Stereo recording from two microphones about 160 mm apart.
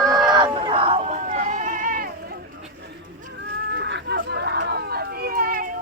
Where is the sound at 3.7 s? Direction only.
90° right; by 5.7 s 65° right (ahead or behind).